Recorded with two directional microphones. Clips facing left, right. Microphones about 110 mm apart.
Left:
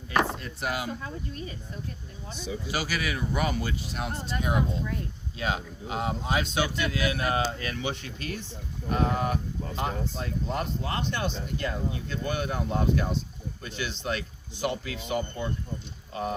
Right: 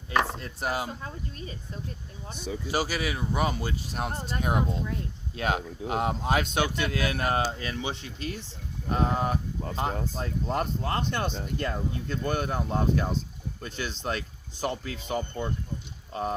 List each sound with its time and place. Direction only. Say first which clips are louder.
0.3 s speech: right 1 dB; 35° right (ahead or behind)
2.6 s speech: right 3 dB; 30° right (ahead or behind)
3.9 s speech: right 2 dB; 45° right (ahead or behind); by 9.9 s 30° right (ahead or behind)
10.2 s speech: right 2 dB; 40° right (ahead or behind)